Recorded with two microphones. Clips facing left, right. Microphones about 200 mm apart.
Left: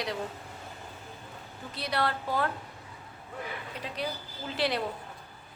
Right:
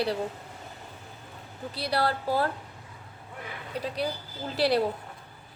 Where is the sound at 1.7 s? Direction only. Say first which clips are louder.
Right 3 dB; 35° right (ahead or behind).